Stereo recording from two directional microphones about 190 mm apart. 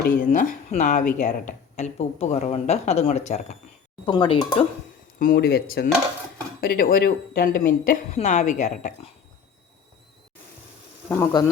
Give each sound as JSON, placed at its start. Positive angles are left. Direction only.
{"t": 0.2, "sound": "speech", "side_deg": 40}
{"t": 5.2, "sound": "speech", "side_deg": 50}
{"t": 11.1, "sound": "speech", "side_deg": 15}